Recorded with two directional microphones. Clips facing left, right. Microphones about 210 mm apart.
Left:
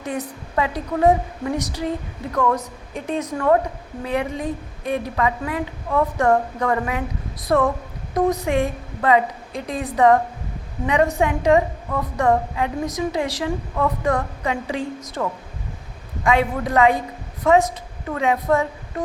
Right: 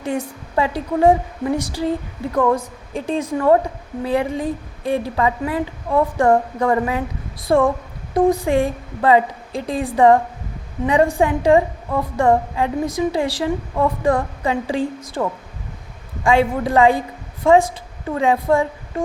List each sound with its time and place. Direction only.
0.0 s a woman's voice: 30° right (ahead or behind)